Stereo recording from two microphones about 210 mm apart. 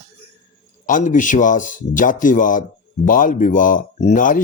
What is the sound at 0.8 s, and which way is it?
Speech, 40° left (ahead or behind).